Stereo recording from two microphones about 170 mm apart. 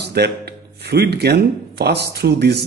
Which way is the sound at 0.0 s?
75° right (ahead or behind).